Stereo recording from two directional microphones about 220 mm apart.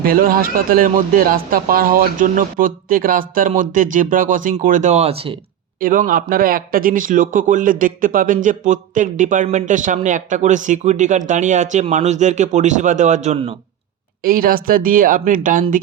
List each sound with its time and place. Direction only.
0.0 s speech: 40° right (ahead or behind); by 5.4 s 25° right (ahead or behind)
5.8 s speech: 40° right (ahead or behind)
14.2 s speech: 40° right (ahead or behind)